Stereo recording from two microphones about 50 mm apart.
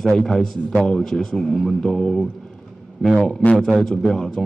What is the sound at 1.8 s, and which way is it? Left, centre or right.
Speech, centre.